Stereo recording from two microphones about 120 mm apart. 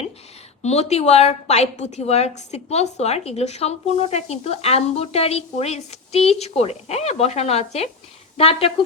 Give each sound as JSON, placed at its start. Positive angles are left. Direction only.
{"t": 0.6, "sound": "a woman's voice", "side_deg": 65}